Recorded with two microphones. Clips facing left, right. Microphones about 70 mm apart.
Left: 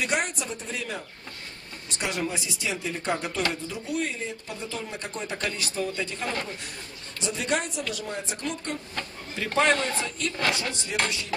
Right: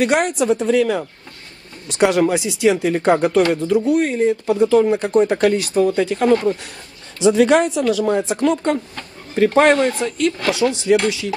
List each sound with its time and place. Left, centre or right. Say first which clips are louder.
0.0 s a woman's voice: right 11 dB; right
1.9 s speech: right 15 dB; right
7.2 s a woman's voice: right 15 dB; right
9.6 s speech: right 8 dB; right
10.5 s a woman's voice: right 15 dB; right